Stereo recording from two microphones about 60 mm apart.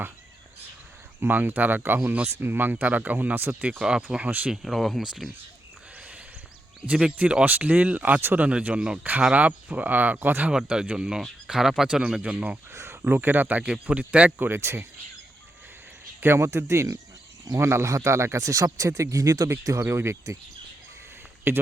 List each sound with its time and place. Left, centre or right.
1.2 s speech: right
4.5 s speech: centre
6.8 s speech: centre
7.4 s speech: right
10.7 s speech: centre
12.7 s speech: right
14.6 s speech: right
16.2 s speech: right
19.8 s speech: right
21.5 s speech: right